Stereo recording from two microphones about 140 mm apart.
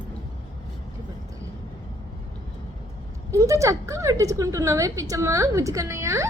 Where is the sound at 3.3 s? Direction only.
20° right (ahead or behind).